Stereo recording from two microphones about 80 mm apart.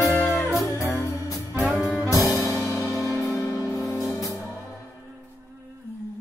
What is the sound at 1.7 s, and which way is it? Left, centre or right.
Jazz, centre.